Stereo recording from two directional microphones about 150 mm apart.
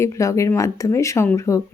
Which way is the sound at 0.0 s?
20° left (ahead or behind).